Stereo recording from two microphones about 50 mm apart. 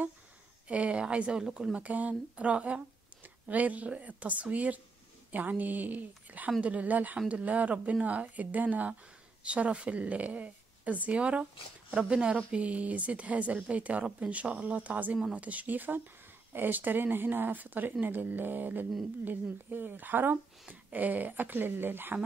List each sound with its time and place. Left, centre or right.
0.7 s speech: right
1.8 s speech: right